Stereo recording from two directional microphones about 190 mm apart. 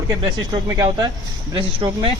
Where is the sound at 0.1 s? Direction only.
20° right (ahead or behind).